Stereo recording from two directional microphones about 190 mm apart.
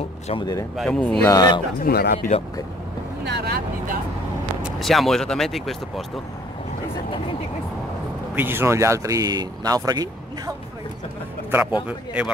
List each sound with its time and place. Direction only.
0.3 s speech: 20° left (ahead or behind)
0.7 s speech: 5° left (ahead or behind)
1.2 s speech: 20° left (ahead or behind)
1.8 s speech: 55° left (ahead or behind)
3.3 s speech: 60° right (ahead or behind)
4.6 s speech: centre (ahead or behind)
8.4 s speech: 10° right (ahead or behind)